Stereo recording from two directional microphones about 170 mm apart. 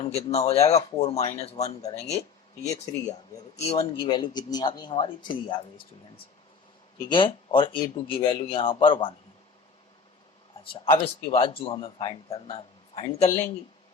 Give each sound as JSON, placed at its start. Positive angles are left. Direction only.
{"t": 0.0, "sound": "a man's voice", "side_deg": 40}
{"t": 3.7, "sound": "speech", "side_deg": 35}
{"t": 7.1, "sound": "a man's voice", "side_deg": 30}
{"t": 10.6, "sound": "a man's voice", "side_deg": 35}